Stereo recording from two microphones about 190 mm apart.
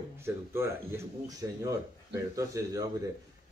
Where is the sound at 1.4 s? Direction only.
15° right (ahead or behind).